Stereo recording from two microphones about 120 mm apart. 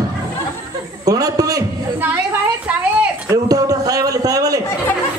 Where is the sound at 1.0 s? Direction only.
30° right (ahead or behind).